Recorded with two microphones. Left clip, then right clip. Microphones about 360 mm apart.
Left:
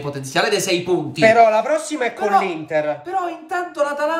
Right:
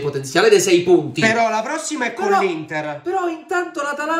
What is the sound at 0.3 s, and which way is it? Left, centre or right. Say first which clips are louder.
Speech: right 5 dB; centre.